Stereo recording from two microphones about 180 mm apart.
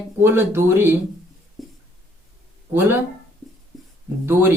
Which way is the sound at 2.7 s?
10° right (ahead or behind).